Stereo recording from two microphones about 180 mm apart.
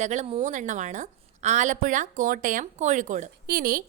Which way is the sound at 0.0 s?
40° right (ahead or behind).